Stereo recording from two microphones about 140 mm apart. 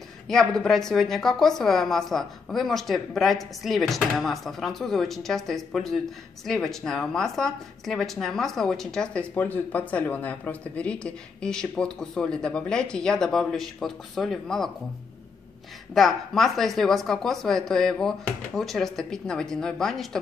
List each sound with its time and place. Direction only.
0.3 s speech: 5° left (ahead or behind)
15.9 s speech: centre (ahead or behind)